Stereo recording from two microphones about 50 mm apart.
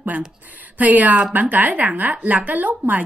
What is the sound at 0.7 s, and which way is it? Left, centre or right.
A woman's voice, right.